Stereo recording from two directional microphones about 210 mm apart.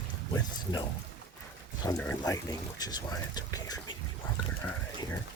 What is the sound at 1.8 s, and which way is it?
Speech, 15° left (ahead or behind).